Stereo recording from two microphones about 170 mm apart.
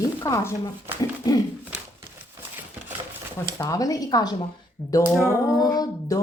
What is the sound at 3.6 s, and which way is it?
Speech, 20° left (ahead or behind).